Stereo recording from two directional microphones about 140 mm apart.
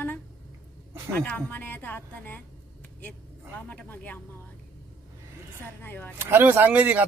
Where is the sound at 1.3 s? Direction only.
15° left (ahead or behind).